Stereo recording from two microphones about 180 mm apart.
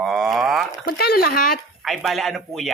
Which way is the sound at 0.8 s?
60° left (ahead or behind).